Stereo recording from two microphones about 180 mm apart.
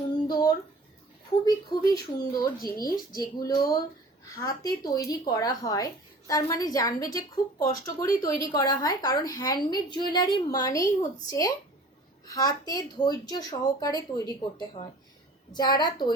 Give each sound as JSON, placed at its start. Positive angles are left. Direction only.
{"t": 0.3, "sound": "a sound", "side_deg": 20}
{"t": 1.5, "sound": "speech", "side_deg": 20}
{"t": 2.6, "sound": "speech", "side_deg": 55}
{"t": 3.1, "sound": "a woman's voice", "side_deg": 20}
{"t": 15.5, "sound": "a woman's voice", "side_deg": 25}